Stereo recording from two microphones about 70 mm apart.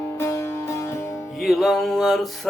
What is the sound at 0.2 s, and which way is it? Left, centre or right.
Music, left.